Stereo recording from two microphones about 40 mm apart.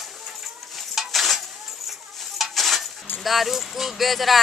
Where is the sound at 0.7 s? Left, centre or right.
Centre.